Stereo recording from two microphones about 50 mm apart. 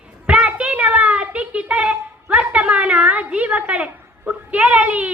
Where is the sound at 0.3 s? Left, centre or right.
Right.